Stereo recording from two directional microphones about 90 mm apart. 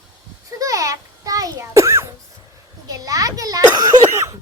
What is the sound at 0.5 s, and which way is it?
A child's voice, 40° right (ahead or behind).